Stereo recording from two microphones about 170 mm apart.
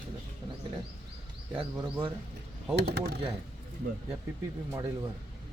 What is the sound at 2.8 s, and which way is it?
Speech, 75° right (ahead or behind).